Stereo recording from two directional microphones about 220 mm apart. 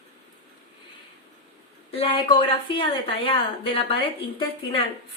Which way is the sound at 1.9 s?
20° left (ahead or behind).